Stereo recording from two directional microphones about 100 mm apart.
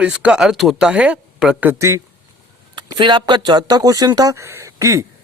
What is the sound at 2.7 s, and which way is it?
Speech, 50° right (ahead or behind).